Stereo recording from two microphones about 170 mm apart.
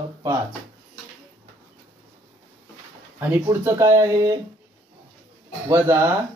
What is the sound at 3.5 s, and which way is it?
Speech, 15° right (ahead or behind).